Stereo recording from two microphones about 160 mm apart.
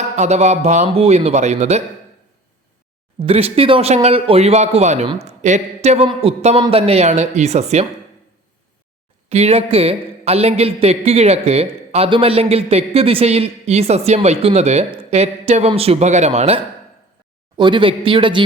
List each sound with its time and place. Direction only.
0.2 s speech: 45° right (ahead or behind)
3.2 s speech: 35° right (ahead or behind)
9.3 s speech: 40° right (ahead or behind)
17.6 s speech: 30° right (ahead or behind)